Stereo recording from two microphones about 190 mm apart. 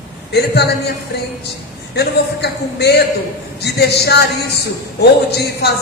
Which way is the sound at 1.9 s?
60° left (ahead or behind).